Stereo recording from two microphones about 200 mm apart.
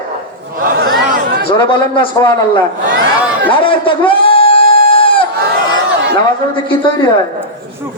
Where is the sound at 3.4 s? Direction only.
25° left (ahead or behind).